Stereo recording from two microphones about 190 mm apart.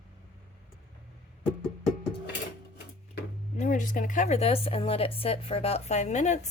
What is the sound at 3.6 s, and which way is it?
A woman's voice, 45° left (ahead or behind).